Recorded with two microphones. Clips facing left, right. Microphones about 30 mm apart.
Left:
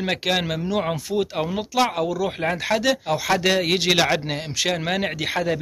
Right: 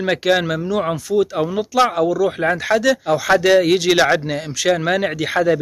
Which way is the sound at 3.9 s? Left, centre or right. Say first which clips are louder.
Right 4 dB; centre.